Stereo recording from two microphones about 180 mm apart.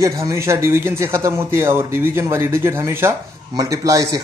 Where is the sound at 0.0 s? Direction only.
15° right (ahead or behind).